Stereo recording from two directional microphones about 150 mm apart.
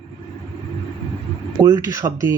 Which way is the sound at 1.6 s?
25° right (ahead or behind).